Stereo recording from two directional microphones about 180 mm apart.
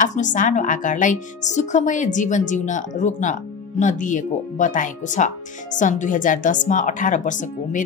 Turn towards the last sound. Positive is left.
turn(degrees=45)  # may be behind; listen again after turning